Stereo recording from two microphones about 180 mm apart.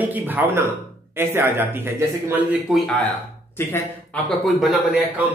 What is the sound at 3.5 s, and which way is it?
Speech, 15° left (ahead or behind).